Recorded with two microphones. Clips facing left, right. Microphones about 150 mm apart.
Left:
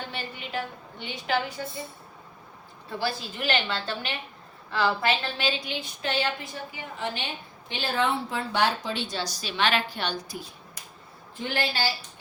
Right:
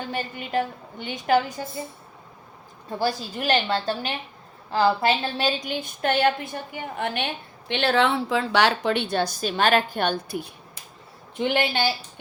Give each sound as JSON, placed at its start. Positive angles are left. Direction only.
{"t": 0.1, "sound": "a woman's voice", "side_deg": -45}
{"t": 3.0, "sound": "a woman's voice", "side_deg": -40}
{"t": 7.7, "sound": "a woman's voice", "side_deg": -75}
{"t": 11.4, "sound": "a woman's voice", "side_deg": -20}